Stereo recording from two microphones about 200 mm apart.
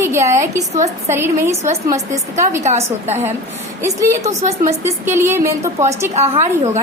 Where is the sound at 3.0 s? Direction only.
35° right (ahead or behind).